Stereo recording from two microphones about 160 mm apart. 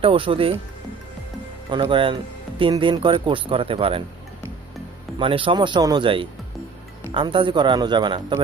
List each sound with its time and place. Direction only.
0.0 s speech: 35° right (ahead or behind)
1.7 s speech: 30° right (ahead or behind)
5.2 s speech: 30° right (ahead or behind)